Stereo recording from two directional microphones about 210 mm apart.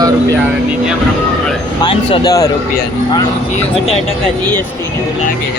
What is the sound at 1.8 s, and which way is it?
Speech, 20° left (ahead or behind).